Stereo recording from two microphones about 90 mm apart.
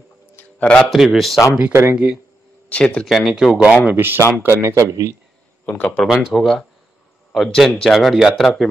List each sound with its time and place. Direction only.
0.4 s a sound: 15° left (ahead or behind)
0.8 s speech: centre (ahead or behind)
1.7 s speech: 25° right (ahead or behind)
2.7 s speech: 10° left (ahead or behind)
3.1 s speech: 5° right (ahead or behind)
3.9 s a man's voice: 25° right (ahead or behind)
5.7 s speech: 15° left (ahead or behind)
6.0 s speech: 5° right (ahead or behind)